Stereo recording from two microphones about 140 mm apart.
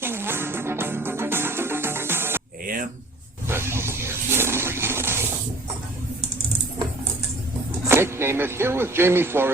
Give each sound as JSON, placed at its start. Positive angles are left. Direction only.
{"t": 0.0, "sound": "music", "side_deg": -15}
{"t": 3.4, "sound": "a sound", "side_deg": -15}
{"t": 7.9, "sound": "speech", "side_deg": -15}